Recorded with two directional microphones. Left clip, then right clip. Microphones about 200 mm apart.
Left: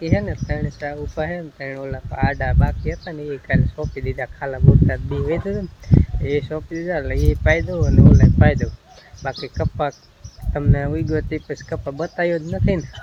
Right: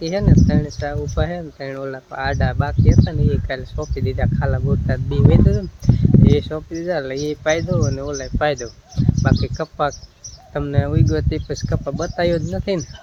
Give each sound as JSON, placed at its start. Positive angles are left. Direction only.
{"t": 0.0, "sound": "speech", "side_deg": -20}